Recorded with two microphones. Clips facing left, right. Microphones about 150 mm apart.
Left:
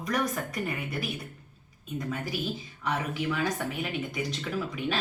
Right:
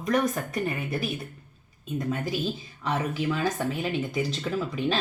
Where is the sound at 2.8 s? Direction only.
25° right (ahead or behind).